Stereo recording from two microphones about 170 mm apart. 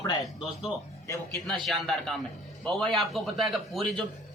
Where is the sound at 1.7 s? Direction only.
Centre (ahead or behind).